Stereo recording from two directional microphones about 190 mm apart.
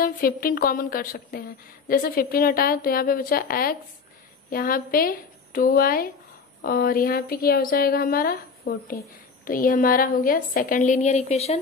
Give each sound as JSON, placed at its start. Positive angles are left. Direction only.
{"t": 0.0, "sound": "a woman's voice", "side_deg": 50}